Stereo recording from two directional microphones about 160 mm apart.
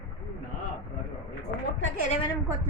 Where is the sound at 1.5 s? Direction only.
55° left (ahead or behind).